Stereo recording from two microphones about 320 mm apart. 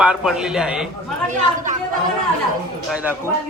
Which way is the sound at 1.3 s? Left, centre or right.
Right.